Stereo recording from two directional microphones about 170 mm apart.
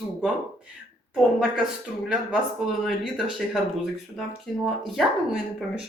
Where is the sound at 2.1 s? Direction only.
5° right (ahead or behind).